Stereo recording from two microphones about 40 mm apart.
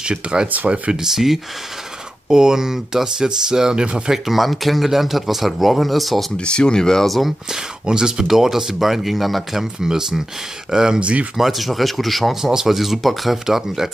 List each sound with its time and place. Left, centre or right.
0.0 s speech: right
0.9 s speech: centre
4.1 s speech: centre
6.3 s speech: left
7.1 s speech: centre
7.5 s speech: centre
8.3 s speech: centre
9.8 s speech: centre
11.0 s speech: right
11.3 s speech: centre